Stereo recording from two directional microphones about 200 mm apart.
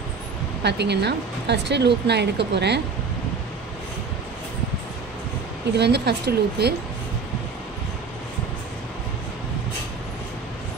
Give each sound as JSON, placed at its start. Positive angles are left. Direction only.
{"t": 0.7, "sound": "speech", "side_deg": -55}
{"t": 5.8, "sound": "speech", "side_deg": -55}